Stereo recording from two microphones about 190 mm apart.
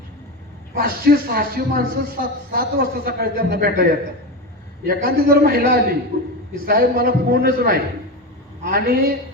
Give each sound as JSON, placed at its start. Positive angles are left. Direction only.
{"t": 0.7, "sound": "a man's voice", "side_deg": -50}
{"t": 4.9, "sound": "a man's voice", "side_deg": -50}